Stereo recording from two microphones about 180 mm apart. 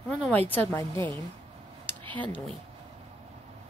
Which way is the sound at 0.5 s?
10° left (ahead or behind).